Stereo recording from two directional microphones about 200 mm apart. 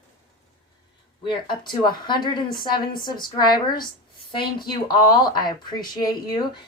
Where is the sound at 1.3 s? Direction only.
20° left (ahead or behind).